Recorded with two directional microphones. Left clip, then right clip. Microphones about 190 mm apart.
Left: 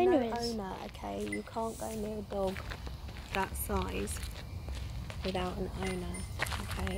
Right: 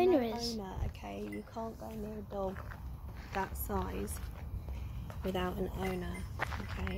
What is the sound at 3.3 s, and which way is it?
Speech, 15° left (ahead or behind).